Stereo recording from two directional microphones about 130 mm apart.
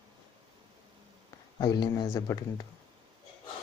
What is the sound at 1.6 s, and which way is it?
Speech, 35° left (ahead or behind).